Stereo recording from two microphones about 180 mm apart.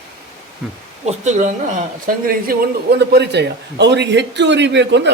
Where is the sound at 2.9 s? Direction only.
65° right (ahead or behind).